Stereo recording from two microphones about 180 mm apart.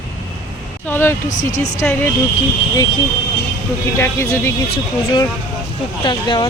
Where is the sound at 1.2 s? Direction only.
45° left (ahead or behind).